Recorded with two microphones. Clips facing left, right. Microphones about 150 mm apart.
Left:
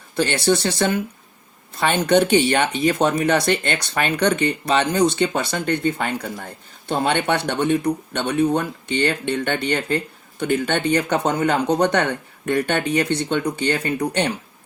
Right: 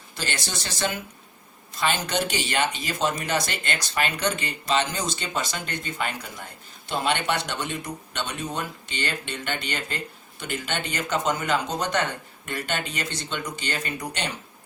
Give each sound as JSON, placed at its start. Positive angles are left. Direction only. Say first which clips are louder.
{"t": 0.2, "sound": "speech", "louder": "left 14 dB", "side_deg": 60}